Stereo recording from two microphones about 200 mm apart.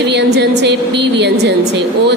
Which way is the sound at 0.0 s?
55° right (ahead or behind).